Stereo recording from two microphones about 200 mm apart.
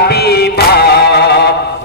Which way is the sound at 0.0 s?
50° left (ahead or behind).